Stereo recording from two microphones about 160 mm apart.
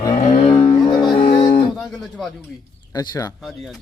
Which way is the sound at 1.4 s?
50° left (ahead or behind).